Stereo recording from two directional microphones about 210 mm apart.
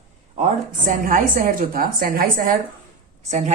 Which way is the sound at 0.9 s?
40° right (ahead or behind).